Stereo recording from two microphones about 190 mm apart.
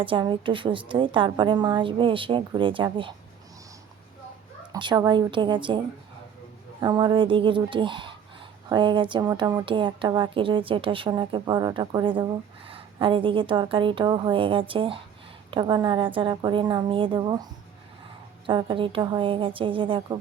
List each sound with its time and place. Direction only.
0.0 s a woman's voice: 25° right (ahead or behind)
4.7 s a woman's voice: 20° right (ahead or behind)
6.8 s a woman's voice: 25° right (ahead or behind)
18.4 s a woman's voice: 25° right (ahead or behind)